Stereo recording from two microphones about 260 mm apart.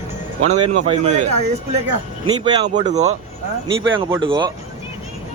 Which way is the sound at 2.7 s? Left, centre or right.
Right.